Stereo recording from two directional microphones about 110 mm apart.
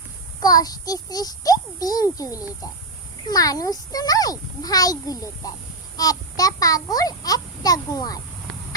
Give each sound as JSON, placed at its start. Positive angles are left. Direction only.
{"t": 0.3, "sound": "a child's voice", "side_deg": 35}